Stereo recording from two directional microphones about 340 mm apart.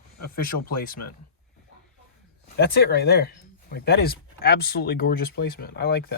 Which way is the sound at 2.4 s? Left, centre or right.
Left.